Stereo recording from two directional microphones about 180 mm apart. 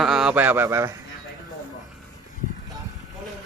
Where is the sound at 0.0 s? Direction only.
Centre (ahead or behind).